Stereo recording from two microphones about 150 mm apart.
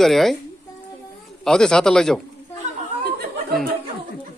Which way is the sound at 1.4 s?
5° left (ahead or behind).